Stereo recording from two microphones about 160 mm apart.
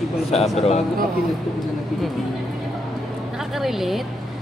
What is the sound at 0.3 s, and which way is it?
Speech, 40° left (ahead or behind).